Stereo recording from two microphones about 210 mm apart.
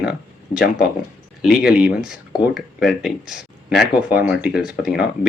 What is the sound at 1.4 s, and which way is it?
Speech, 5° right (ahead or behind).